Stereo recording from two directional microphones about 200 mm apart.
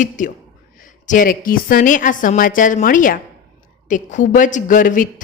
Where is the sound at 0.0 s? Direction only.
40° left (ahead or behind).